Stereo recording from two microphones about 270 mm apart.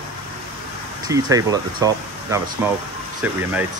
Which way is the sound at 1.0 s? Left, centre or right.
Centre.